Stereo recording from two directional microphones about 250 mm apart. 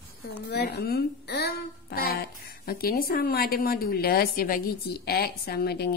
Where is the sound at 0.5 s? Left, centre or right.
Left.